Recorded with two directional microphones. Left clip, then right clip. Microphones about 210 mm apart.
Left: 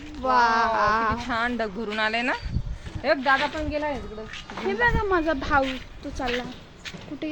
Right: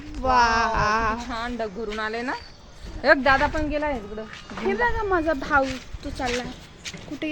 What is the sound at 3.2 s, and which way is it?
Speech, 50° right (ahead or behind).